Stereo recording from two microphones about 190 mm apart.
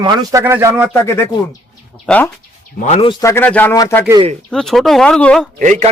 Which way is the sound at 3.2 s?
10° left (ahead or behind).